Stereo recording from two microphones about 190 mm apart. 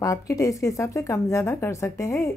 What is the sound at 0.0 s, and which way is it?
A woman's voice, 15° left (ahead or behind).